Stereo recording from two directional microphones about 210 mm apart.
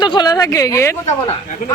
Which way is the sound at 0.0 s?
20° left (ahead or behind).